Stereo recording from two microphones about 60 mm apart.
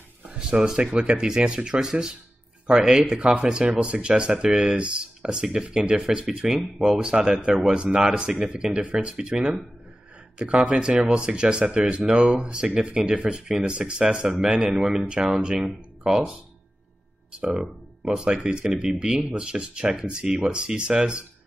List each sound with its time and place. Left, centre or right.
0.4 s speech: centre
17.4 s speech: centre